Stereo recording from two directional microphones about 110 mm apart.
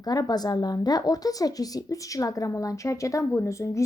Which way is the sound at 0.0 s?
35° left (ahead or behind).